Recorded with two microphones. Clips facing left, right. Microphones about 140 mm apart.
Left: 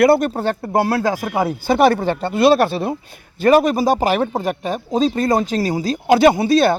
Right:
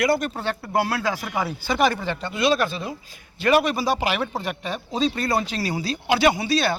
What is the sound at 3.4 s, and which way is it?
Speech, 45° left (ahead or behind).